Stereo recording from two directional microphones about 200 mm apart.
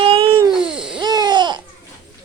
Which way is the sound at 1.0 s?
20° right (ahead or behind).